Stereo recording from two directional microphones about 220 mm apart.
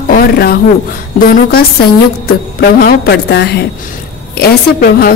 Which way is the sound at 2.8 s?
45° left (ahead or behind).